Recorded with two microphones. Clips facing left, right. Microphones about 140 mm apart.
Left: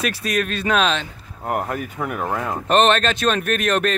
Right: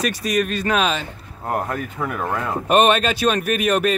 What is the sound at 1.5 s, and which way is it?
Speech, 15° left (ahead or behind).